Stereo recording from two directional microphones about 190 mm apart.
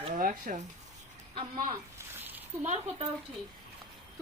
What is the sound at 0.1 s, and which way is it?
Speech, 45° right (ahead or behind).